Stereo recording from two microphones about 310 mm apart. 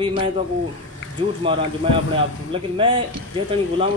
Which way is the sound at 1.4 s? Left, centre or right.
Centre.